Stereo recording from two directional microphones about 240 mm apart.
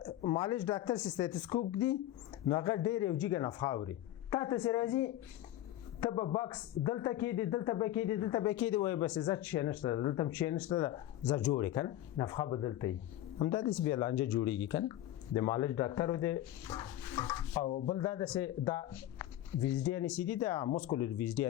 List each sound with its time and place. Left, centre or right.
0.0 s speech: left
1.2 s speech: centre
2.5 s speech: centre
17.7 s speech: left
17.9 s speech: centre